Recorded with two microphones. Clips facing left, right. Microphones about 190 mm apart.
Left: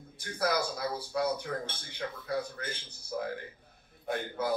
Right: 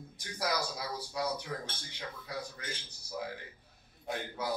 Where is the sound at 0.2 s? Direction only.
55° left (ahead or behind).